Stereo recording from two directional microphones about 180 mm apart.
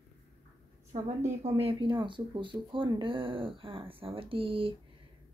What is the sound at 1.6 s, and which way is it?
Speech, 25° right (ahead or behind).